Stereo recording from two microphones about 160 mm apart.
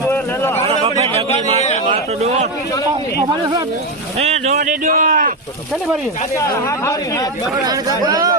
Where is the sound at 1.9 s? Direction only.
40° right (ahead or behind).